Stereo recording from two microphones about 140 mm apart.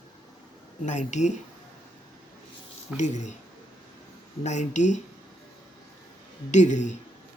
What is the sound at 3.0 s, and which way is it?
Speech, 60° left (ahead or behind).